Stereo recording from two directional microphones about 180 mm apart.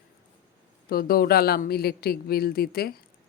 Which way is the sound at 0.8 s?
55° left (ahead or behind).